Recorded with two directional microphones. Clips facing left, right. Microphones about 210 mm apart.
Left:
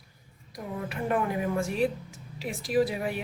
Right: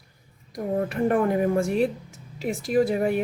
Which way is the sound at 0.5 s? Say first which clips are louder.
Right 9 dB; 50° right (ahead or behind).